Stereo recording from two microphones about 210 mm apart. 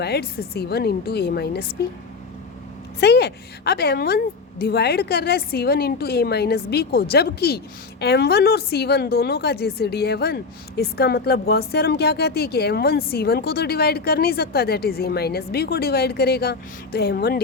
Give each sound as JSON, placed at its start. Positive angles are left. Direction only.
{"t": 0.0, "sound": "speech", "side_deg": 50}
{"t": 3.0, "sound": "speech", "side_deg": 50}